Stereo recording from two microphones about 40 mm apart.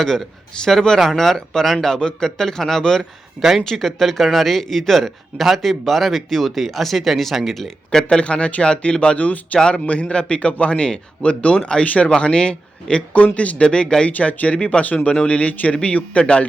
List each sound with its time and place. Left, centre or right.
0.0 s a man's voice: centre
3.4 s speech: centre
3.7 s speech: centre
8.2 s speech: left
9.6 s speech: left
9.8 s speech: left
13.1 s a man's voice: left
13.7 s speech: left
14.1 s a man's voice: left